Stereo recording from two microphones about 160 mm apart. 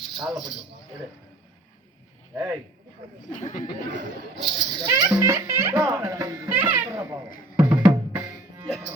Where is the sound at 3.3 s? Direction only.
55° left (ahead or behind).